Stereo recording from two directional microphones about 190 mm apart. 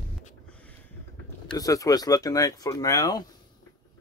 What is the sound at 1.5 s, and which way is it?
Speech, 20° left (ahead or behind).